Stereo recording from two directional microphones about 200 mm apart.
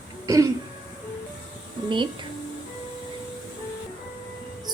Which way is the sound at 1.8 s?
25° right (ahead or behind).